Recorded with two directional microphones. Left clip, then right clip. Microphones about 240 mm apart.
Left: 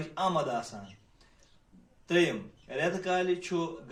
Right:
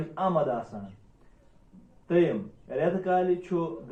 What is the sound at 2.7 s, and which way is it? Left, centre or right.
Speech, left.